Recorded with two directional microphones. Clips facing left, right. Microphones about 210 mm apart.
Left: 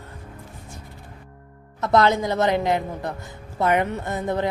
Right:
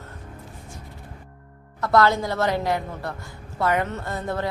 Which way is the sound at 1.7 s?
20° left (ahead or behind).